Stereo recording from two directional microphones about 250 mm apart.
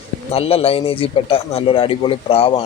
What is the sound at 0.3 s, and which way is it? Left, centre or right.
Speech, left.